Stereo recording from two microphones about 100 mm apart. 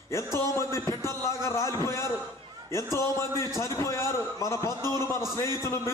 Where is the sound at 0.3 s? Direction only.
30° left (ahead or behind).